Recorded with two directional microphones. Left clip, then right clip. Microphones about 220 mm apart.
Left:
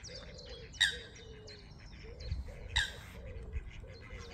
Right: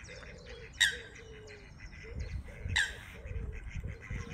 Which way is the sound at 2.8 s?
35° right (ahead or behind).